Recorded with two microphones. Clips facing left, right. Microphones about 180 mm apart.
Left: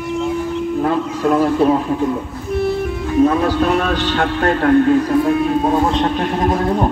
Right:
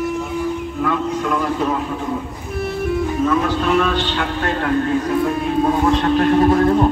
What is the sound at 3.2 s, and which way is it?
A man's voice, 35° left (ahead or behind).